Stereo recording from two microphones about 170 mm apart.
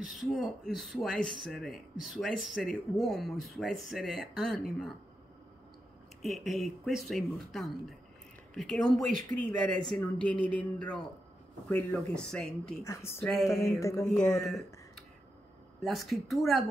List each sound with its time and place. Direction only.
0.0 s speech: centre (ahead or behind)
6.2 s a woman's voice: centre (ahead or behind)
12.8 s a woman's voice: 15° left (ahead or behind)
13.2 s speech: centre (ahead or behind)
13.7 s a woman's voice: 15° left (ahead or behind)
14.0 s speech: 5° left (ahead or behind)